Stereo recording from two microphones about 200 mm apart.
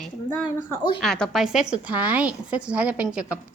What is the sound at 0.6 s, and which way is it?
Speech, 15° left (ahead or behind).